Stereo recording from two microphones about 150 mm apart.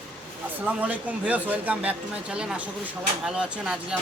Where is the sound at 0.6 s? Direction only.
10° right (ahead or behind).